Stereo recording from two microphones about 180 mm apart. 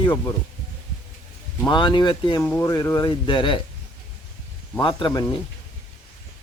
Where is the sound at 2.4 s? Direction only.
10° left (ahead or behind); by 3.6 s 25° left (ahead or behind).